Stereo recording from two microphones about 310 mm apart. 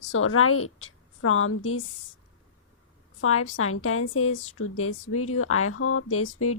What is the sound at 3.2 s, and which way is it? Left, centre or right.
A woman's voice, left.